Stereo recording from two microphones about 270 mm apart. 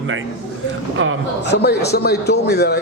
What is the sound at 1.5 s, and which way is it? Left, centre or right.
A man's voice, left.